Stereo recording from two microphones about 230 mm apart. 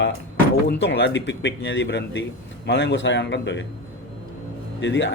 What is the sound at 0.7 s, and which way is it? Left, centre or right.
A man's voice, left.